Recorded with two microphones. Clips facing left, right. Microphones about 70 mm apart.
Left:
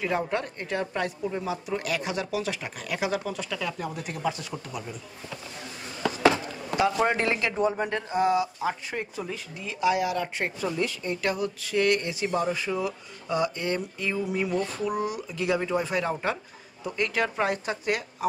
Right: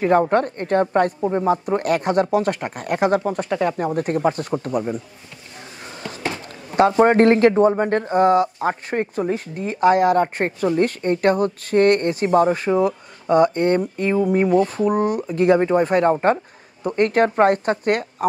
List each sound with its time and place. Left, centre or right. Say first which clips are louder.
0.0 s speech: right 11 dB; right
6.2 s a sound: left 7 dB; left
6.9 s speech: right 11 dB; right